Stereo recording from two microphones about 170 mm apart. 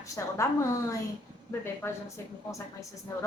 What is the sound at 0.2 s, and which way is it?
Speech, 15° left (ahead or behind).